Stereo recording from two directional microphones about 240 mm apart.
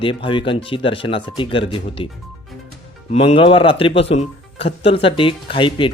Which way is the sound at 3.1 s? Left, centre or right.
Left.